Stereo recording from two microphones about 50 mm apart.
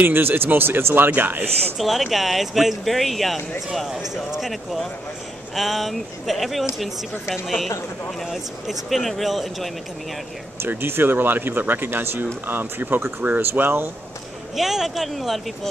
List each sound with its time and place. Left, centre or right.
0.0 s speech: right
1.8 s speech: centre
10.7 s speech: right
12.4 s speech: right
14.5 s speech: centre